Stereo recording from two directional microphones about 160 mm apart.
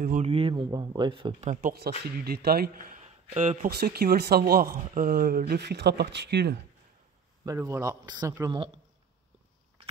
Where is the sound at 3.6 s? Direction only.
75° right (ahead or behind); by 6.5 s 90° right.